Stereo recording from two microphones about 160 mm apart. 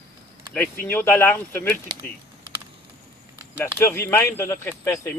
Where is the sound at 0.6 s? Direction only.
15° left (ahead or behind).